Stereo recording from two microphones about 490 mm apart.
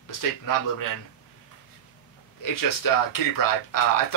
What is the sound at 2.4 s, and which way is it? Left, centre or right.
Speech, left.